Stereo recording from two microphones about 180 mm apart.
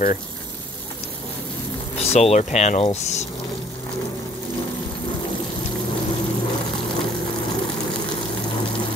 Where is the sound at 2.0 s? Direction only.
35° left (ahead or behind).